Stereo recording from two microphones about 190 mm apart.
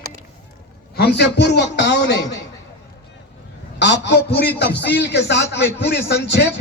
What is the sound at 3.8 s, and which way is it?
Speech, 65° left (ahead or behind).